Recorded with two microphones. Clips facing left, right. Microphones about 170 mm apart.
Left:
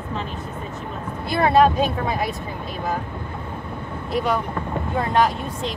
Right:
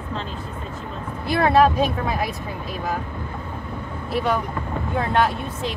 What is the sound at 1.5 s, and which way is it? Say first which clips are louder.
Speech: left 1 dB; centre (ahead or behind).